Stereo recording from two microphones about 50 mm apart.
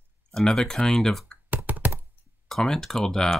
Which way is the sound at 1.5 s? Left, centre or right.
Right.